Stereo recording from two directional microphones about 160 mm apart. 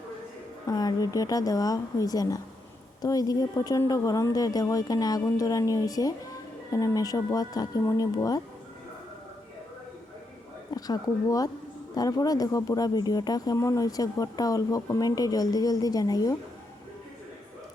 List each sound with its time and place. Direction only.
0.7 s speech: 25° left (ahead or behind)
10.7 s speech: 25° left (ahead or behind)